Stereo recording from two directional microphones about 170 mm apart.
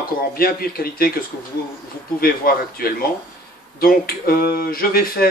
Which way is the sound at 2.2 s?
60° left (ahead or behind).